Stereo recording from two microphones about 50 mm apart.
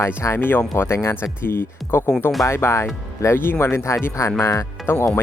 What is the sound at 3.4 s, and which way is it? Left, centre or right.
Speech, left.